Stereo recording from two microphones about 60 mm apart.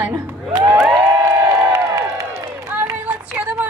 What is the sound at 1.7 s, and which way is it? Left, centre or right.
Crowd, right.